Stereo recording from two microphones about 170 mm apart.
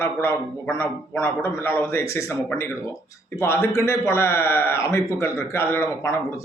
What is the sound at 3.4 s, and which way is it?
A man's voice, 15° left (ahead or behind).